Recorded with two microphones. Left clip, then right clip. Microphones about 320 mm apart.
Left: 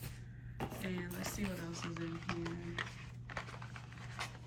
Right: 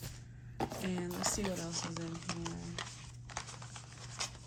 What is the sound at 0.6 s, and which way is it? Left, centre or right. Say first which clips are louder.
Speech: right 4 dB; centre.